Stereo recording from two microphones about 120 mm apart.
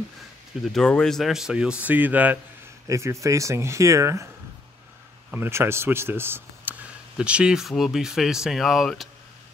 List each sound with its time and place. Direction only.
0.6 s speech: 5° left (ahead or behind); by 2.3 s 15° right (ahead or behind)
2.9 s speech: 25° right (ahead or behind)
5.3 s speech: 20° right (ahead or behind); by 9.1 s centre (ahead or behind)